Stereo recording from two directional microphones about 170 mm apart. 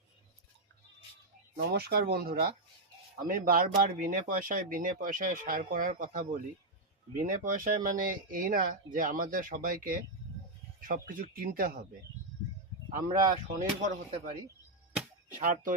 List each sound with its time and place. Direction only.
1.5 s speech: 65° right (ahead or behind)
13.1 s speech: 25° right (ahead or behind)
15.3 s speech: 50° right (ahead or behind)